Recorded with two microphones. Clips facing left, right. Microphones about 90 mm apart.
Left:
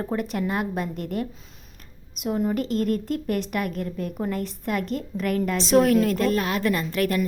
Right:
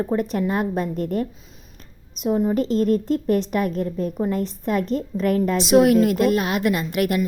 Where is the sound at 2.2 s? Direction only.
20° right (ahead or behind).